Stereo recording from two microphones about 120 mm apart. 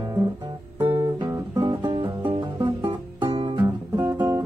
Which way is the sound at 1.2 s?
30° right (ahead or behind).